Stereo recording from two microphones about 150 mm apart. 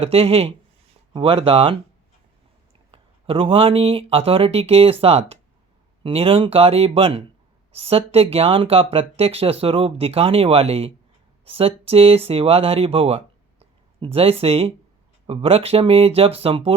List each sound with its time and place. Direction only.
0.0 s speech: 40° right (ahead or behind)
2.9 s speech: 40° right (ahead or behind)